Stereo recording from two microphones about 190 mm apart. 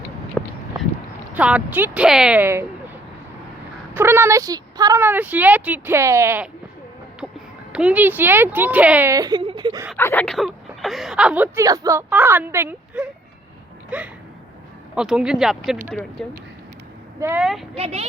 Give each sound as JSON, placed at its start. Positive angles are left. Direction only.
{"t": 0.4, "sound": "a sound", "side_deg": 5}
{"t": 1.3, "sound": "speech", "side_deg": -5}
{"t": 3.9, "sound": "a woman's voice", "side_deg": -10}
{"t": 10.0, "sound": "speech", "side_deg": 15}
{"t": 10.2, "sound": "speech", "side_deg": 0}
{"t": 17.2, "sound": "speech", "side_deg": -15}
{"t": 17.4, "sound": "speech", "side_deg": 0}
{"t": 17.7, "sound": "speech", "side_deg": -35}